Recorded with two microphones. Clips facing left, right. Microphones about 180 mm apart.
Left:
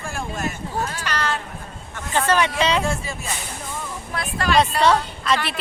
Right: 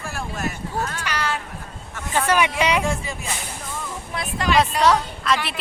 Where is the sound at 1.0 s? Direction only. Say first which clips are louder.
Left 1 dB; 10° right (ahead or behind).